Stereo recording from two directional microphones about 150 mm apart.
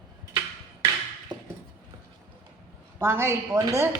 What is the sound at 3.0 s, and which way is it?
Speech, 15° right (ahead or behind).